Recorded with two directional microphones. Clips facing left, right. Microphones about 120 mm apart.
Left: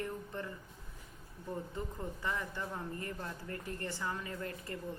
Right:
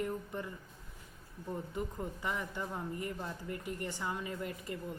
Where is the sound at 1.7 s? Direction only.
15° right (ahead or behind).